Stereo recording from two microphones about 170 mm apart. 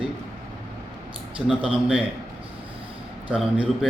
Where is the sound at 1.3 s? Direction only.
5° right (ahead or behind).